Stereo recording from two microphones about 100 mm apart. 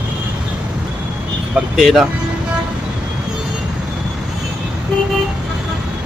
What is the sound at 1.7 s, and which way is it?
Speech, centre (ahead or behind).